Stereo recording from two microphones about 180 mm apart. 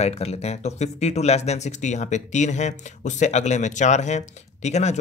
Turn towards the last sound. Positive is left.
turn(degrees=40)  # may be behind; listen again after turning